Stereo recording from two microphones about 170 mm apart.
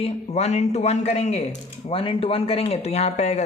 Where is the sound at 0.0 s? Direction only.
40° left (ahead or behind).